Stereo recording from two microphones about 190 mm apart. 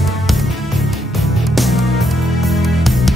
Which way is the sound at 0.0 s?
Centre (ahead or behind).